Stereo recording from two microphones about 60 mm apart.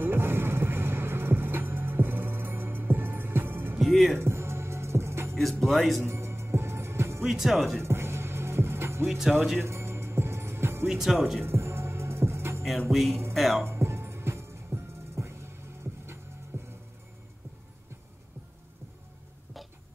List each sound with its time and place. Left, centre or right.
0.0 s music: right
3.8 s music: centre
4.2 s music: right
5.4 s speech: centre
6.0 s music: right
7.2 s speech: centre
7.8 s music: right
10.9 s speech: centre
11.4 s music: right
13.3 s speech: centre
13.7 s music: right